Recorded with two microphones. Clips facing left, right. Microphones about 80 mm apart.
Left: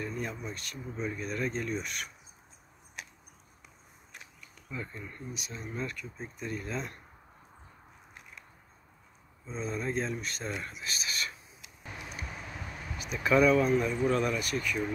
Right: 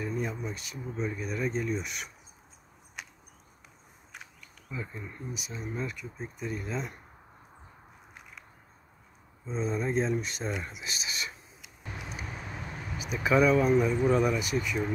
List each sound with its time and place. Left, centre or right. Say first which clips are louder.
0.0 s speech: right 3 dB; centre
4.6 s speech: right 1 dB; centre
9.5 s speech: right 4 dB; centre
12.9 s speech: right 1 dB; centre